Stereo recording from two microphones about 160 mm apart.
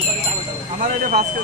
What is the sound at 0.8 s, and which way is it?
Speech, 55° right (ahead or behind).